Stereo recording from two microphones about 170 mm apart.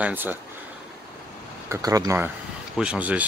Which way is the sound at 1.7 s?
20° right (ahead or behind).